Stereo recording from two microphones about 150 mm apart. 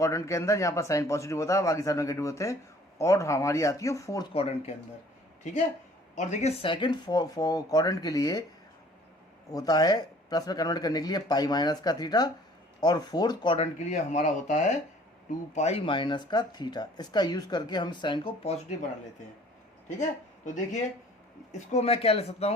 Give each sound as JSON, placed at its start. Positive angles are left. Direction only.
{"t": 0.0, "sound": "speech", "side_deg": 20}
{"t": 4.4, "sound": "speech", "side_deg": 45}
{"t": 6.1, "sound": "speech", "side_deg": 50}
{"t": 9.5, "sound": "speech", "side_deg": 25}
{"t": 13.6, "sound": "speech", "side_deg": 50}
{"t": 15.9, "sound": "speech", "side_deg": 30}
{"t": 18.4, "sound": "speech", "side_deg": 45}
{"t": 20.0, "sound": "speech", "side_deg": 55}
{"t": 21.7, "sound": "speech", "side_deg": 45}